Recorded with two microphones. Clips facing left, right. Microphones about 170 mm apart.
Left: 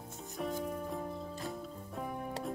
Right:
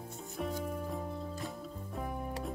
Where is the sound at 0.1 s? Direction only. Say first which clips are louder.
Left 1 dB; centre (ahead or behind).